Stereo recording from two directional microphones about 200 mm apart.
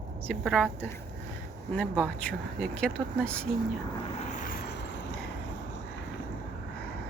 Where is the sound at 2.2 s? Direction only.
5° left (ahead or behind).